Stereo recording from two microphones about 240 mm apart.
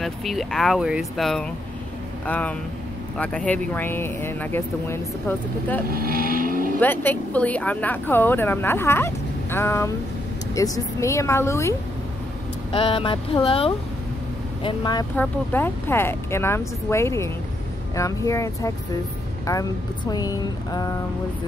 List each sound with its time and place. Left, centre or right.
0.0 s speech: centre
5.9 s speech: right
6.8 s speech: centre
12.7 s speech: left
20.1 s speech: centre